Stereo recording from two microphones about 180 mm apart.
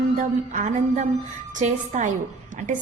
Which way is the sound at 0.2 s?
45° right (ahead or behind).